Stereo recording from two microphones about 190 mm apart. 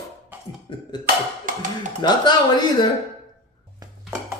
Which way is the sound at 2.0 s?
20° left (ahead or behind).